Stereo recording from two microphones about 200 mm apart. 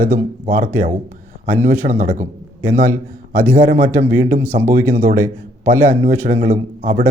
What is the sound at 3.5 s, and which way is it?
Speech, 40° right (ahead or behind).